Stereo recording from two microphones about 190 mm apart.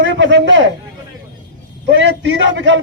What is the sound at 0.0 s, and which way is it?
Speech, 70° right (ahead or behind).